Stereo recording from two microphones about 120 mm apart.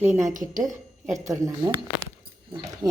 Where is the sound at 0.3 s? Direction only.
90° right.